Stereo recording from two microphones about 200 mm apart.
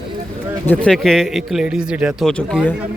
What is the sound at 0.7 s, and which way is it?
Speech, 5° left (ahead or behind).